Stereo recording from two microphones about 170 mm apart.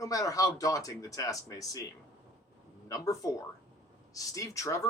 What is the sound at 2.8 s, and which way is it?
Speech, 20° left (ahead or behind).